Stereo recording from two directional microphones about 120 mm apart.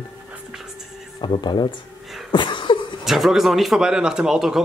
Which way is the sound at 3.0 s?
Centre (ahead or behind).